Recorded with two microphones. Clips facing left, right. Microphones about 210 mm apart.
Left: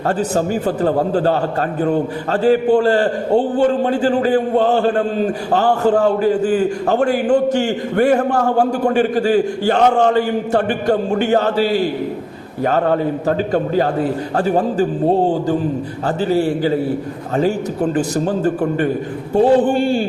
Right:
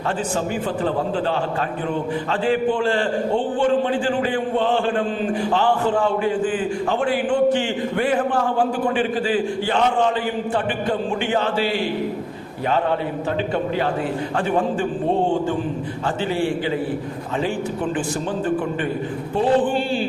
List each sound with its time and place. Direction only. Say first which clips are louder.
0.3 s a man's voice: left 5 dB; 40° left (ahead or behind)
16.0 s a man's voice: left 6 dB; 40° left (ahead or behind)
17.9 s a man's voice: left 6 dB; 40° left (ahead or behind)